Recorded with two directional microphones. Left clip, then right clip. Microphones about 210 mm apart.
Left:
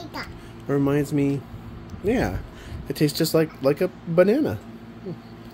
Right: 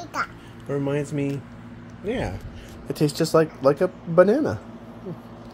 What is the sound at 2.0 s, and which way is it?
Speech, 35° left (ahead or behind).